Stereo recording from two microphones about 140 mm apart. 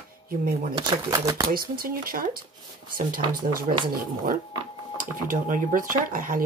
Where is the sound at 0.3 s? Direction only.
90° right.